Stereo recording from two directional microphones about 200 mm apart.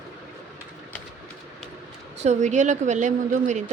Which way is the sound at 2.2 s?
35° right (ahead or behind).